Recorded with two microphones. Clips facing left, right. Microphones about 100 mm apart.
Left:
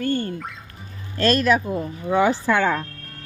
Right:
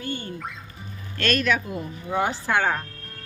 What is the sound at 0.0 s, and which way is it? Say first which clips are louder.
Music: left 8 dB; 50° left (ahead or behind).